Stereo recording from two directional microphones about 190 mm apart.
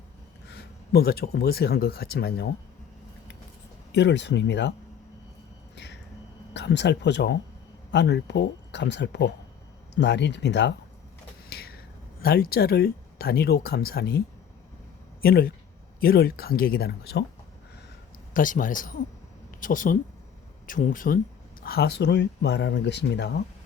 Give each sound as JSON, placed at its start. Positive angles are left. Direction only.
{"t": 0.4, "sound": "speech", "side_deg": 60}
{"t": 3.9, "sound": "speech", "side_deg": 65}
{"t": 5.7, "sound": "a sound", "side_deg": 65}
{"t": 6.5, "sound": "speech", "side_deg": 65}
{"t": 11.4, "sound": "a sound", "side_deg": 55}
{"t": 12.2, "sound": "speech", "side_deg": 55}
{"t": 15.2, "sound": "speech", "side_deg": 50}
{"t": 18.3, "sound": "speech", "side_deg": 45}